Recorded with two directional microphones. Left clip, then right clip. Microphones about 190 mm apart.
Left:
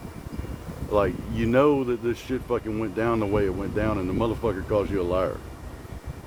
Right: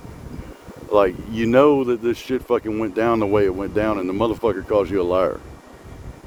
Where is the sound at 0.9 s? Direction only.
65° right (ahead or behind).